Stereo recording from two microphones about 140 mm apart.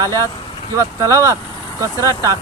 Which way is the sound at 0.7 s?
20° right (ahead or behind).